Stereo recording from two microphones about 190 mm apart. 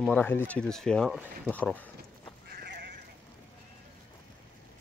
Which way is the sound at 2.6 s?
60° right (ahead or behind).